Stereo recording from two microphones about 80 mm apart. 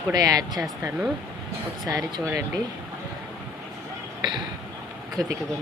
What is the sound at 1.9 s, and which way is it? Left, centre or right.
Speech, right.